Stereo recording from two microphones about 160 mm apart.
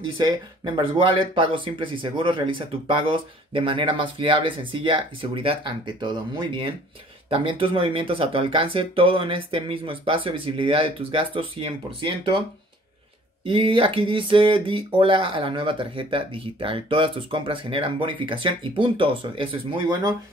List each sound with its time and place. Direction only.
0.2 s speech: 25° right (ahead or behind)
13.5 s speech: 35° right (ahead or behind)